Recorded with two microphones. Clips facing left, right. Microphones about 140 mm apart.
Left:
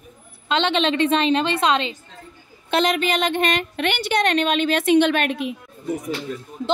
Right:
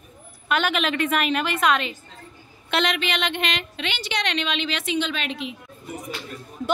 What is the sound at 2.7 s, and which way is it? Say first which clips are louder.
Speech: left 4 dB; 40° left (ahead or behind).